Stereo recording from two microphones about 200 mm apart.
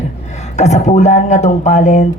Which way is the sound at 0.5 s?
35° left (ahead or behind).